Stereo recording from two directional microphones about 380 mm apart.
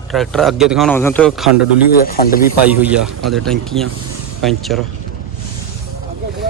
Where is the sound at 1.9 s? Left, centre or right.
Left.